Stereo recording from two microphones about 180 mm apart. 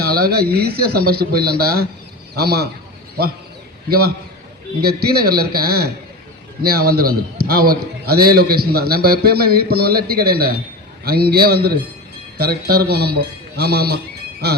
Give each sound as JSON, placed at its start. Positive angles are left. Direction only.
{"t": 0.0, "sound": "a sound", "side_deg": -60}
{"t": 0.5, "sound": "a man's voice", "side_deg": -60}
{"t": 3.8, "sound": "a man's voice", "side_deg": -60}